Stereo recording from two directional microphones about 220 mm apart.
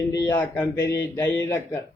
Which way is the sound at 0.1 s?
10° left (ahead or behind).